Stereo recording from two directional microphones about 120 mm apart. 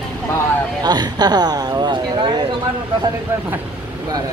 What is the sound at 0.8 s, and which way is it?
Speech, 35° right (ahead or behind).